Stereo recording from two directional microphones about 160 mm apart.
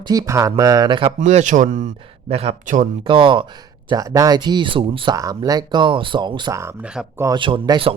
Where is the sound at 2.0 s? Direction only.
40° right (ahead or behind).